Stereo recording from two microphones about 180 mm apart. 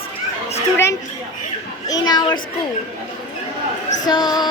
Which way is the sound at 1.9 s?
20° left (ahead or behind).